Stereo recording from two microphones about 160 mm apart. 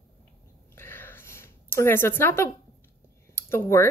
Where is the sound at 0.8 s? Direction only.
15° left (ahead or behind).